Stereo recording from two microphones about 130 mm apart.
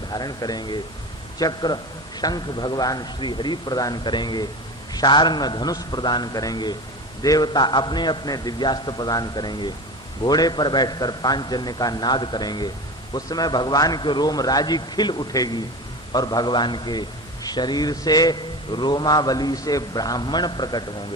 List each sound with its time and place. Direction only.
0.1 s a man's voice: 30° left (ahead or behind)